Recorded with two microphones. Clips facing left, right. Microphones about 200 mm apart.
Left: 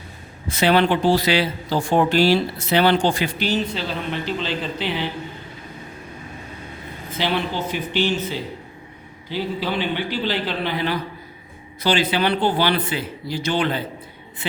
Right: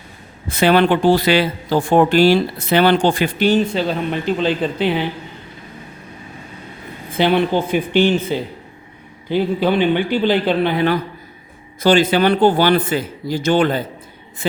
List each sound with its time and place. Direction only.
0.5 s speech: 50° right (ahead or behind)
7.2 s speech: 55° right (ahead or behind)